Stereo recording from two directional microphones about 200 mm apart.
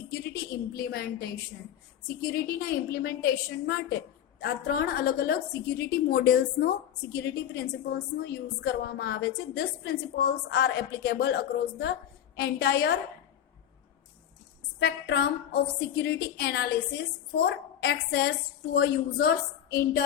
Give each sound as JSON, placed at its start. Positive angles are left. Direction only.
{"t": 0.1, "sound": "a woman's voice", "side_deg": 55}
{"t": 14.8, "sound": "a woman's voice", "side_deg": 55}